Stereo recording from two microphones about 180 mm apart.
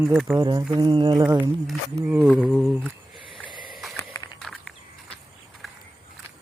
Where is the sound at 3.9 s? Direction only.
15° left (ahead or behind).